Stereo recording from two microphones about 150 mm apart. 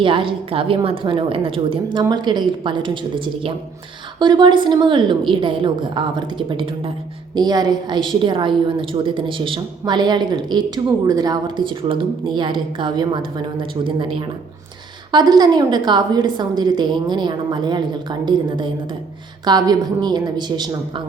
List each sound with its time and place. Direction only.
0.0 s a woman's voice: 35° right (ahead or behind)
15.1 s a woman's voice: 30° right (ahead or behind)